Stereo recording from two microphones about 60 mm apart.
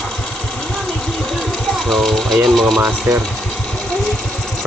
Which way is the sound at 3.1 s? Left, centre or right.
Right.